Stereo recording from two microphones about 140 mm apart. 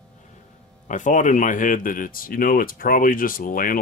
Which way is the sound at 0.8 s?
65° left (ahead or behind).